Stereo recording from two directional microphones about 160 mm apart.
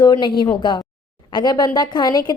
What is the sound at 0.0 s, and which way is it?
A woman's voice, 25° left (ahead or behind).